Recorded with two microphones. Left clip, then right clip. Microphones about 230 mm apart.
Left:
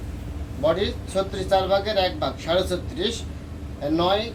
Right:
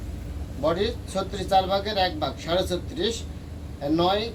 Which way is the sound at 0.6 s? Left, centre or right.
Centre.